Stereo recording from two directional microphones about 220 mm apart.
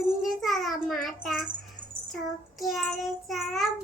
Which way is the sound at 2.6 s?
Centre (ahead or behind).